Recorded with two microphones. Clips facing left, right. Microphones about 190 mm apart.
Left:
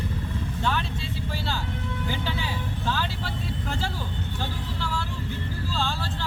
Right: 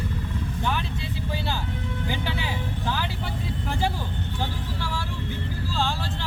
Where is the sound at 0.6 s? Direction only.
15° right (ahead or behind).